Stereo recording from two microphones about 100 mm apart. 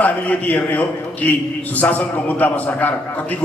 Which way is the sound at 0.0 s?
15° left (ahead or behind).